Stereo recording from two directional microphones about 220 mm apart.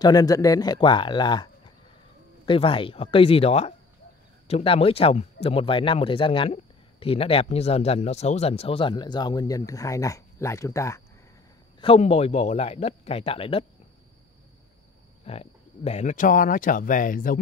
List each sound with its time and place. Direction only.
0.0 s speech: 15° left (ahead or behind)
11.8 s speech: 25° left (ahead or behind)
15.2 s speech: 30° left (ahead or behind)